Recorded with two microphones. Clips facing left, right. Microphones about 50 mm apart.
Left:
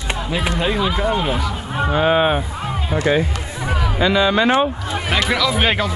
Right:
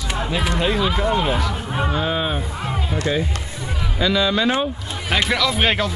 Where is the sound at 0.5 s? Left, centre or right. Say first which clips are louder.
Even; centre.